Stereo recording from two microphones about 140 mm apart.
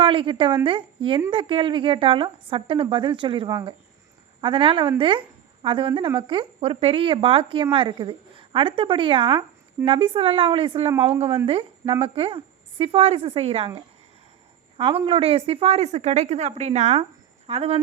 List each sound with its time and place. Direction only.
0.0 s a woman's voice: 40° right (ahead or behind)
14.8 s speech: 40° right (ahead or behind)
17.0 s a sound: 45° right (ahead or behind)